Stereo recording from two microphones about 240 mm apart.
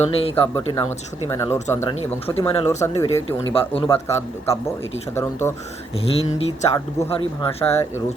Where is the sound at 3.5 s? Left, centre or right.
Left.